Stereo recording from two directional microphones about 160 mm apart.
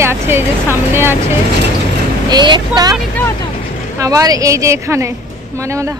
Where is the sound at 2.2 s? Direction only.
30° right (ahead or behind).